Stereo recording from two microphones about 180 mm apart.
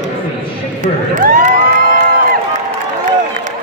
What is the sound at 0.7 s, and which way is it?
Crowd, 45° right (ahead or behind).